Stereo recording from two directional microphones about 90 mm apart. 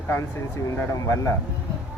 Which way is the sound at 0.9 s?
40° left (ahead or behind).